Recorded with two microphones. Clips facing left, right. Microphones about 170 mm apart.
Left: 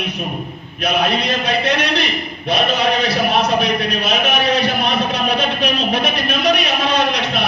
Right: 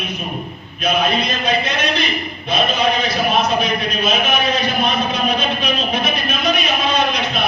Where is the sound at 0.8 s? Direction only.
70° left (ahead or behind).